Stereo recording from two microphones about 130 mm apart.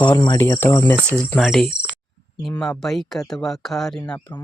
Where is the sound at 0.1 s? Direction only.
35° left (ahead or behind).